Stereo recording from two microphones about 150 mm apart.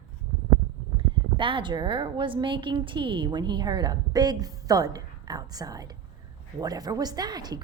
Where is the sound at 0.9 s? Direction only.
35° right (ahead or behind).